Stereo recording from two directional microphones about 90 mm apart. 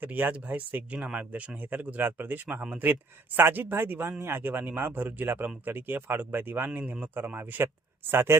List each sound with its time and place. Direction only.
0.0 s speech: 20° right (ahead or behind)